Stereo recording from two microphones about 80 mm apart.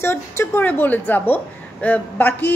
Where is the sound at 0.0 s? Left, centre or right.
Left.